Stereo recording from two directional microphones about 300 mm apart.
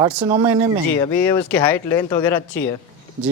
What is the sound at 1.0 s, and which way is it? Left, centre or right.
Speech, centre.